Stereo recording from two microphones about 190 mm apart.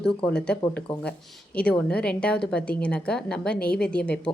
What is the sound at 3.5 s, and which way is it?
Speech, 50° left (ahead or behind).